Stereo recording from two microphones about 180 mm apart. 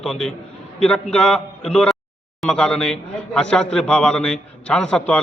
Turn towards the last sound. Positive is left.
turn(degrees=5)  # may be behind; listen again after turning